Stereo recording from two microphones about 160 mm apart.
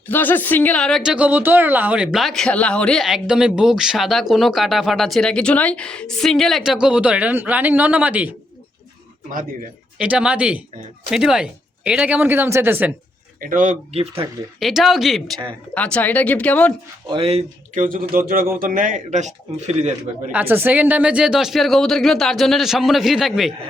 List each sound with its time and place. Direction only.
0.1 s a woman's voice: 10° left (ahead or behind); by 8.4 s 10° right (ahead or behind)
10.0 s speech: 5° right (ahead or behind)
13.4 s speech: 55° right (ahead or behind)
14.6 s a woman's voice: centre (ahead or behind)
17.1 s speech: 35° right (ahead or behind)
17.8 s speech: 60° right (ahead or behind); by 20.3 s 45° right (ahead or behind)
20.3 s a woman's voice: 15° right (ahead or behind)